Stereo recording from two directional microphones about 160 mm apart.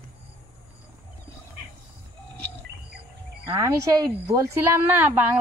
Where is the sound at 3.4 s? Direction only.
20° right (ahead or behind).